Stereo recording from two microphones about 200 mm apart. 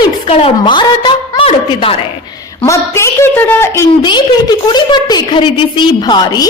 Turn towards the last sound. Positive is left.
turn(degrees=20)  # may be behind; listen again after turning